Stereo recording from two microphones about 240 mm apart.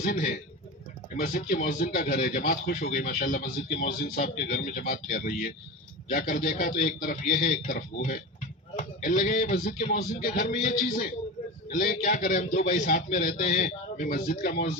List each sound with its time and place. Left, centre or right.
0.0 s speech: left